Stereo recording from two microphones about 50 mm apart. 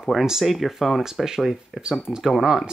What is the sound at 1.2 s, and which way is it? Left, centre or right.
Speech, centre.